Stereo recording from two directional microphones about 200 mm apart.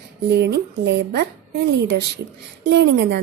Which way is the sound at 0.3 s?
55° right (ahead or behind).